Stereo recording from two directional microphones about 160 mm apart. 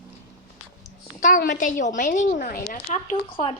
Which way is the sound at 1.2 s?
65° left (ahead or behind).